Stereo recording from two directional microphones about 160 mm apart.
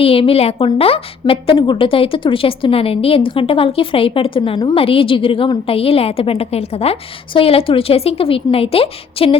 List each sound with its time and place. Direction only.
0.0 s a woman's voice: 35° left (ahead or behind)